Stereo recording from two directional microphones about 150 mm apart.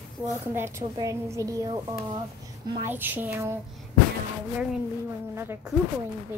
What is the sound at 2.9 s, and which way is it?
Speech, 15° right (ahead or behind).